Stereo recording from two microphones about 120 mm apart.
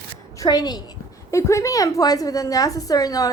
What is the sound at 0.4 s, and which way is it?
A woman's voice, 35° left (ahead or behind).